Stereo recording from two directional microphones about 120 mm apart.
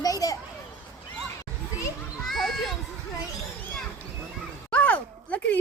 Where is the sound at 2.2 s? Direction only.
5° left (ahead or behind).